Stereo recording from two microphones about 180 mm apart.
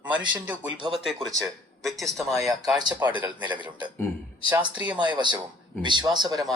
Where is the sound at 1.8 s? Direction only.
Centre (ahead or behind).